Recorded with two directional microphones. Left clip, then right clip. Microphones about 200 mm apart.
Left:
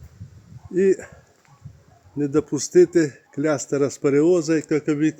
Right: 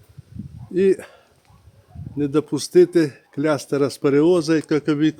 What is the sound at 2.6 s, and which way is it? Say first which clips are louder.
Speech: right 1 dB; 20° right (ahead or behind).